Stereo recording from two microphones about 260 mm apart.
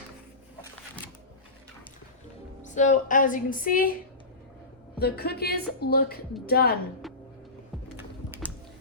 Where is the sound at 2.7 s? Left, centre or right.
Left.